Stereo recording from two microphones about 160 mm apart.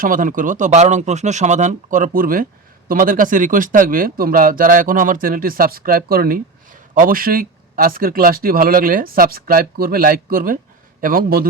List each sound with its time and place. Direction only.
0.0 s speech: 60° right (ahead or behind)